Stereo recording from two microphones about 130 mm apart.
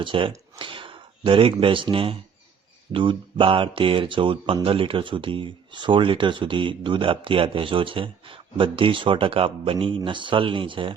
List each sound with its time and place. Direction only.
0.0 s speech: 40° right (ahead or behind)